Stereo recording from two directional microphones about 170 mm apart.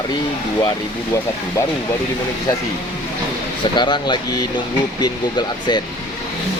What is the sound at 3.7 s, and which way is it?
Speech, 25° left (ahead or behind).